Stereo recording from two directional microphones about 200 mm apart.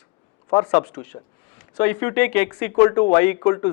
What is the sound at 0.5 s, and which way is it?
Speech, 10° left (ahead or behind).